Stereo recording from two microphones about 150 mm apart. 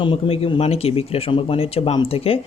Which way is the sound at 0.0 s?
35° left (ahead or behind).